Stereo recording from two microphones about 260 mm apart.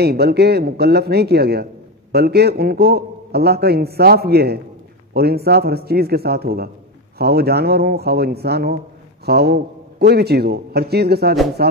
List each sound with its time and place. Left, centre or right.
0.0 s a man's voice: right